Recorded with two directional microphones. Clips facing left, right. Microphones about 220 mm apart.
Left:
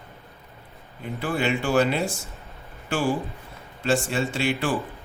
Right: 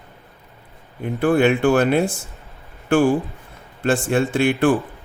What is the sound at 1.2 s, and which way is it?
Speech, 55° right (ahead or behind).